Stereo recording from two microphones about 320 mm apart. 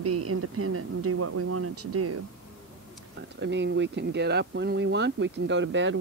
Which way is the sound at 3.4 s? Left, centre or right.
Right.